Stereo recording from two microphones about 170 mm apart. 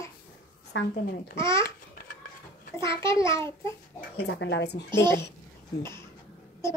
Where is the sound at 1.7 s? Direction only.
60° left (ahead or behind).